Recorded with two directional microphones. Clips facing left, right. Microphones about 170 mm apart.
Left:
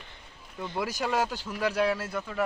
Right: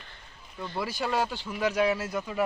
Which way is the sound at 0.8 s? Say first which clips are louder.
Even; 5° left (ahead or behind).